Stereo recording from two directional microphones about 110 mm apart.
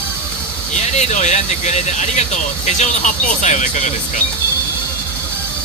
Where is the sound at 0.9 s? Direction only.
90° left.